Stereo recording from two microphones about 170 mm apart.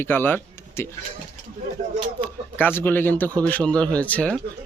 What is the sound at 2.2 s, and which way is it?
Speech, 10° left (ahead or behind).